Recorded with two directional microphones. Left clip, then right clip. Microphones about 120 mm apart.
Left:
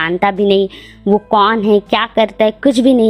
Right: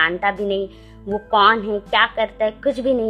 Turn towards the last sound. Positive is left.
turn(degrees=40)  # may be behind; listen again after turning